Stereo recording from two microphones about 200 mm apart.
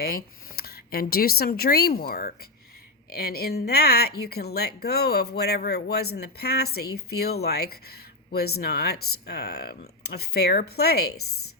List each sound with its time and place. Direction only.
0.5 s speech: 50° left (ahead or behind)